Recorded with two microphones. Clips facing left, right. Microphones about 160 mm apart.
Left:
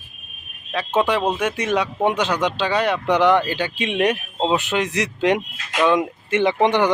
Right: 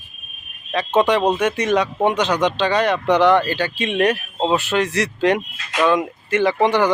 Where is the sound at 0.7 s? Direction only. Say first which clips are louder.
Right 3 dB; 5° left (ahead or behind).